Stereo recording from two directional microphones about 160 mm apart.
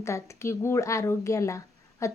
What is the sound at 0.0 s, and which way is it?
Speech, 20° left (ahead or behind).